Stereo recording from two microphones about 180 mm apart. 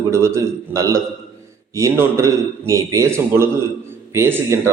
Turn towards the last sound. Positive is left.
turn(degrees=-15)  # may be behind; listen again after turning